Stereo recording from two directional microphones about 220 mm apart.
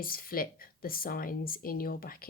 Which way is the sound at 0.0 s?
40° left (ahead or behind).